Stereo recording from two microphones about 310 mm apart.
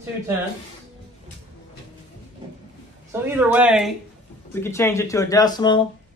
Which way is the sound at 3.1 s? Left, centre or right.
Centre.